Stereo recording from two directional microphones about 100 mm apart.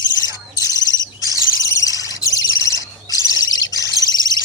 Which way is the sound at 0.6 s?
40° left (ahead or behind).